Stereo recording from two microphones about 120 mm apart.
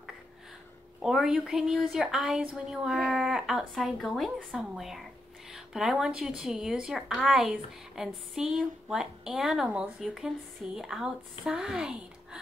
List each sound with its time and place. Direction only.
1.0 s a woman's voice: 5° right (ahead or behind)